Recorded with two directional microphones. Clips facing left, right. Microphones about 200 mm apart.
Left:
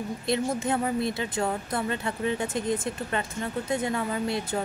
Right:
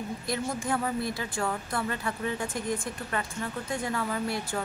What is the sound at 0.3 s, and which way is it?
Speech, 20° left (ahead or behind).